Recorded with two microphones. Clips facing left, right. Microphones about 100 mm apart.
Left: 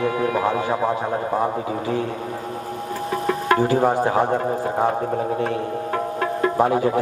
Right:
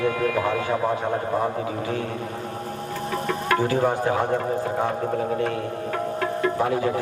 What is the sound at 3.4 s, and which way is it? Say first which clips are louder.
Speech: left 3 dB; 30° left (ahead or behind).